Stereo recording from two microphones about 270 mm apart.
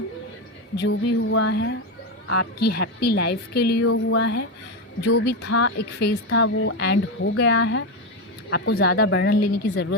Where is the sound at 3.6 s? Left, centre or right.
Left.